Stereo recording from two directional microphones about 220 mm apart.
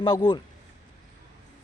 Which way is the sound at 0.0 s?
20° left (ahead or behind).